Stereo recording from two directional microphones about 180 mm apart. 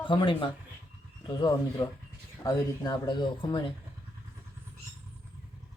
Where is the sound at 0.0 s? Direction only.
25° left (ahead or behind).